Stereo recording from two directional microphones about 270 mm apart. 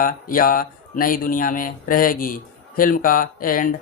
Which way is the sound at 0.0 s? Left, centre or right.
Left.